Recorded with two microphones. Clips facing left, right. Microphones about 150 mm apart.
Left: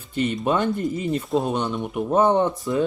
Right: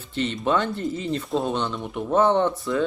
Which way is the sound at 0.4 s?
15° left (ahead or behind).